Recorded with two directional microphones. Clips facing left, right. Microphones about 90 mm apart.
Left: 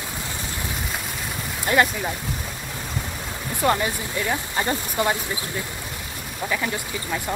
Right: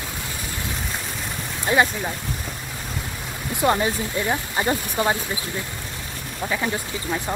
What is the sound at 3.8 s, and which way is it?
Speech, 20° right (ahead or behind).